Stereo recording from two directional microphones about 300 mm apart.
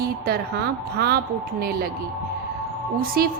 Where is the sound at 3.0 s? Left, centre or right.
Right.